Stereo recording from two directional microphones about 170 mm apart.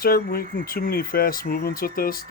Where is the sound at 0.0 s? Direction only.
60° left (ahead or behind).